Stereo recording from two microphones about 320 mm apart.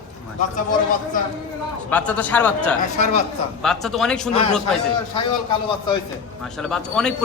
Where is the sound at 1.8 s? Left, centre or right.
Centre.